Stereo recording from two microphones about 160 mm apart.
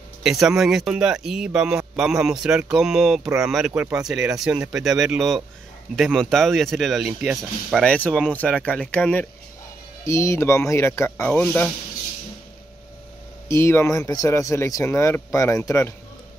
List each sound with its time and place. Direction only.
0.2 s speech: 5° right (ahead or behind)
13.5 s speech: 15° left (ahead or behind)